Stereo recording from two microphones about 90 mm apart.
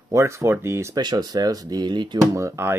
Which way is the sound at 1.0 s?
50° right (ahead or behind).